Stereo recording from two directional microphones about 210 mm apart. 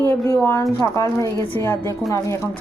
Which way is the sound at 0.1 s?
10° left (ahead or behind).